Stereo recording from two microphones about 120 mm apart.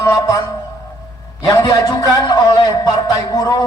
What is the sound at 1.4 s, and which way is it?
A man's voice, 35° left (ahead or behind).